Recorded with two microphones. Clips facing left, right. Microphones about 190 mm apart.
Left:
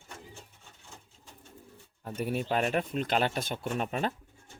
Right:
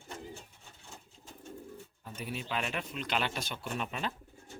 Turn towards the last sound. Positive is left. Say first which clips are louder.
# left 5 dB
turn(degrees=45)  # may be behind; listen again after turning